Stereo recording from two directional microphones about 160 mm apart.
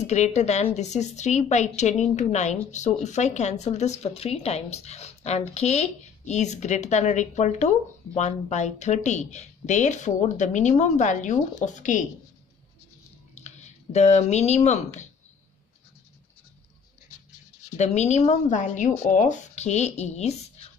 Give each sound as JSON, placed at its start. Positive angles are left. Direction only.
{"t": 0.0, "sound": "a woman's voice", "side_deg": 45}
{"t": 13.3, "sound": "speech", "side_deg": 45}
{"t": 17.7, "sound": "a woman's voice", "side_deg": 45}